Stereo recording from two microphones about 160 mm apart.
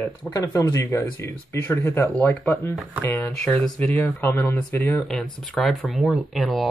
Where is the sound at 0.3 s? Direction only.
20° left (ahead or behind).